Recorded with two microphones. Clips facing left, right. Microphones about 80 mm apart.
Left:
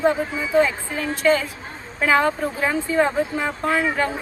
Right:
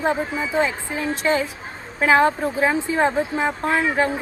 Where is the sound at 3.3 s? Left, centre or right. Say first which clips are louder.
Right 1 dB; right.